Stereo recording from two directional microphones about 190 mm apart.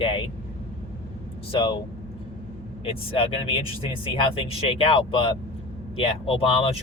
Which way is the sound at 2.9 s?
30° left (ahead or behind).